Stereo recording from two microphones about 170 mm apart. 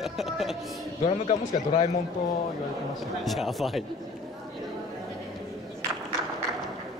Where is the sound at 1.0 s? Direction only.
40° left (ahead or behind).